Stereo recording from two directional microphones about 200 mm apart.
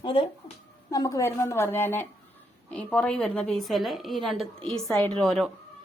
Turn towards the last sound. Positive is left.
turn(degrees=0)  # may be behind; listen again after turning